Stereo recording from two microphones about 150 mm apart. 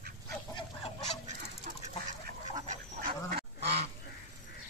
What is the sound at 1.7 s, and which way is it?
Duck, 60° right (ahead or behind).